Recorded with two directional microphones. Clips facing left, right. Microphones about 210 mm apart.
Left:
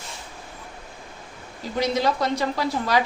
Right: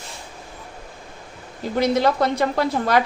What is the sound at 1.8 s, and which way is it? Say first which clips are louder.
A woman's voice: right 4 dB; 55° right (ahead or behind).